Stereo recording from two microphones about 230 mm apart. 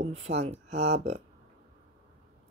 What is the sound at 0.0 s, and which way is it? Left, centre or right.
Speech, right.